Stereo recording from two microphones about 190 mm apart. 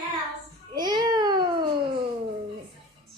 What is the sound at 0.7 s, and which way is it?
Babbling, 20° right (ahead or behind).